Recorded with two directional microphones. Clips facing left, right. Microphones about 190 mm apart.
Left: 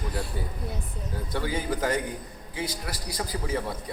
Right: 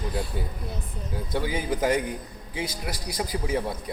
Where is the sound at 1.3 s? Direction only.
15° right (ahead or behind).